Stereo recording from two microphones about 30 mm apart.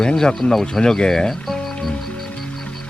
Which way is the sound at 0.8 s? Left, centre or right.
Left.